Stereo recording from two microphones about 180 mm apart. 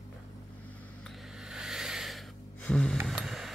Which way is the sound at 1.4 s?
5° right (ahead or behind).